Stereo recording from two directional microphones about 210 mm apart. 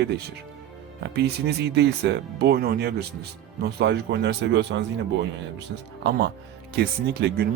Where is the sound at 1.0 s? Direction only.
50° right (ahead or behind).